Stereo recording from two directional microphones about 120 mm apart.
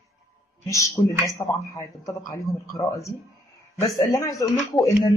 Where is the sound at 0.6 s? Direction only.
25° left (ahead or behind).